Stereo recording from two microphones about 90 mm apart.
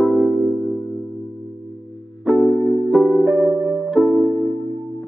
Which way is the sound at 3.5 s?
20° right (ahead or behind).